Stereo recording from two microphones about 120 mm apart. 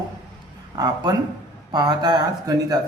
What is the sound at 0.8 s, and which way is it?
Speech, 35° right (ahead or behind).